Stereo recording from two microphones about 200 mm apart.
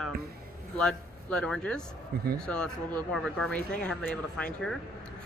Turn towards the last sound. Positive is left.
turn(degrees=5)  # may be behind; listen again after turning